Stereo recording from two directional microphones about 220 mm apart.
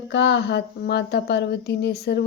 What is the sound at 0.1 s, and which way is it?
Speech, 50° left (ahead or behind).